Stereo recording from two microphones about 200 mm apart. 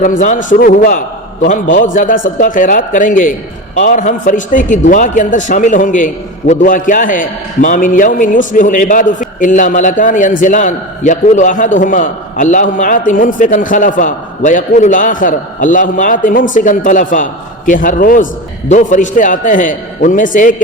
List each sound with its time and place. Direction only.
0.0 s a man's voice: 40° left (ahead or behind)